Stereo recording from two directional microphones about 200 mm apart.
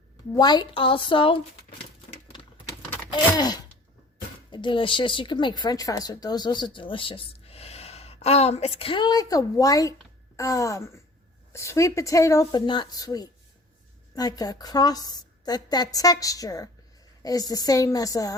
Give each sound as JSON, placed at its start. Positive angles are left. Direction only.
{"t": 0.3, "sound": "speech", "side_deg": 20}
{"t": 3.2, "sound": "gasp", "side_deg": 20}
{"t": 4.5, "sound": "a woman's voice", "side_deg": 25}